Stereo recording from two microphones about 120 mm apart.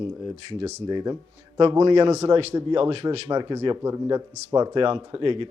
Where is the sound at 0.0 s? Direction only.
45° right (ahead or behind).